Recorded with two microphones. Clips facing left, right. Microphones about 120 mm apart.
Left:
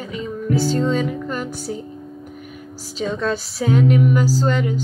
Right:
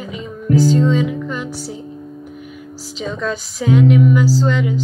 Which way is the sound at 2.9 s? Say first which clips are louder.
Left 1 dB; 35° left (ahead or behind).